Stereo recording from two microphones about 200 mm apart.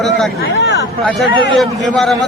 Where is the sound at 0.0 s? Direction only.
Centre (ahead or behind).